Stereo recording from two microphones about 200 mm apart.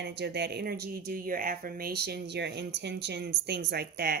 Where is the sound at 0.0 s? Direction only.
60° right (ahead or behind).